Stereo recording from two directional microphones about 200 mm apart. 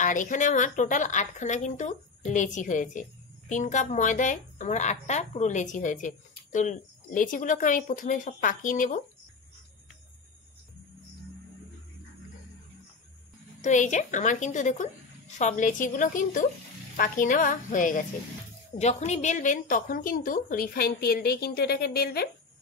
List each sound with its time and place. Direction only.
0.0 s a woman's voice: 40° left (ahead or behind)
13.6 s a woman's voice: 40° left (ahead or behind)